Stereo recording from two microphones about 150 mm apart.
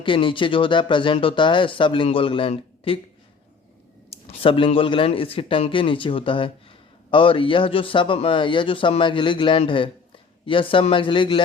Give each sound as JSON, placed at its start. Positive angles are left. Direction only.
{"t": 0.0, "sound": "speech", "side_deg": 35}
{"t": 4.3, "sound": "speech", "side_deg": 35}